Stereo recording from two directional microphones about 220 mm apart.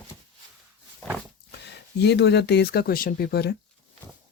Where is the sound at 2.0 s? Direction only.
50° left (ahead or behind).